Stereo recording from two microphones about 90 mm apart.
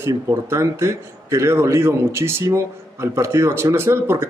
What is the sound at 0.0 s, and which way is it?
A man's voice, 30° right (ahead or behind).